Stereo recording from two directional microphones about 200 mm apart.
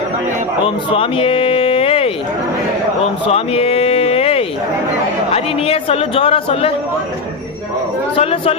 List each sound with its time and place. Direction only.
0.9 s a sound: 25° left (ahead or behind)
5.3 s a man's voice: 30° left (ahead or behind)
8.1 s a man's voice: 30° left (ahead or behind)